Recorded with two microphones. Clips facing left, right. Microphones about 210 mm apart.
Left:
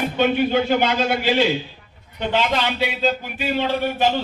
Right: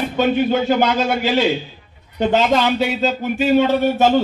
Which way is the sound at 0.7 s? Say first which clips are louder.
Right 2 dB; 45° right (ahead or behind).